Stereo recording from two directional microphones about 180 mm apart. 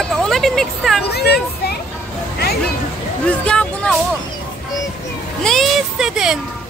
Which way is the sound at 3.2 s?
5° left (ahead or behind).